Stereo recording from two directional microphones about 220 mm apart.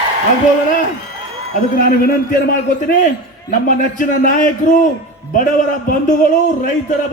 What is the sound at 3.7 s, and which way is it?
A man's voice, 40° left (ahead or behind).